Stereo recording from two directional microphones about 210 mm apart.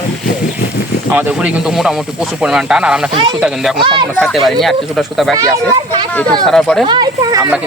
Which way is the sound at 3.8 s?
25° right (ahead or behind).